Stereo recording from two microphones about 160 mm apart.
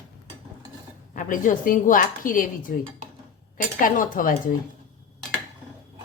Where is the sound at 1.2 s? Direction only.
55° left (ahead or behind).